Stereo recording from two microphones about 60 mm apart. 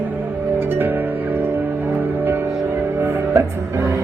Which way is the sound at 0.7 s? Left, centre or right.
Right.